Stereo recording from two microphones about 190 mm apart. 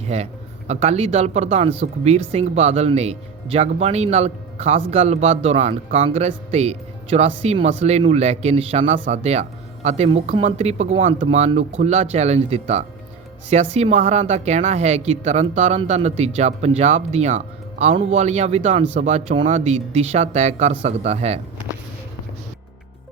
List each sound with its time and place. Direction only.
0.0 s a man's voice: 35° right (ahead or behind)